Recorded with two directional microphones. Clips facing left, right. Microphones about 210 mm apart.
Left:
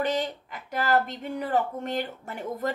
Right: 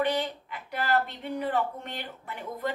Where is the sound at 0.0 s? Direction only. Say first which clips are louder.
Left 1 dB; 45° left (ahead or behind).